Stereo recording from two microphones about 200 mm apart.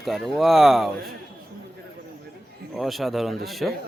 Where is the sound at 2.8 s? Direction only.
Centre (ahead or behind).